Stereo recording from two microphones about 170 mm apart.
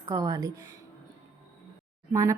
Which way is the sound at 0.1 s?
20° right (ahead or behind).